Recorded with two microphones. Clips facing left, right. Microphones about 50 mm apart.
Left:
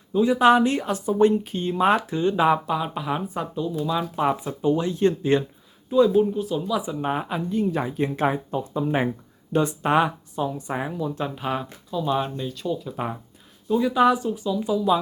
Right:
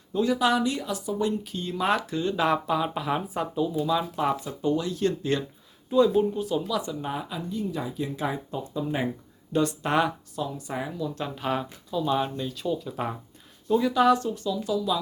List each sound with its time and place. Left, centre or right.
0.3 s speech: left; by 2.6 s centre
2.6 s speech: centre
4.1 s a woman's voice: centre
5.9 s speech: centre
6.7 s a woman's voice: centre
7.0 s speech: left
11.1 s speech: centre
13.9 s a woman's voice: centre